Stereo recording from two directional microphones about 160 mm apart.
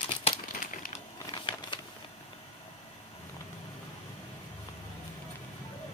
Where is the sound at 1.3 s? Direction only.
30° left (ahead or behind).